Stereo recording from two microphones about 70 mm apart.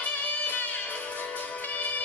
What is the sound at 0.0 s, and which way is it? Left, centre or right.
Music, left.